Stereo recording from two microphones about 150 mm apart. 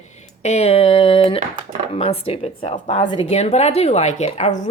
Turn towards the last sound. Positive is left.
turn(degrees=50)  # may be behind; listen again after turning